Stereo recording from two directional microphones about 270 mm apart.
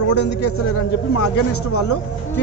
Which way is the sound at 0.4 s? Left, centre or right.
Left.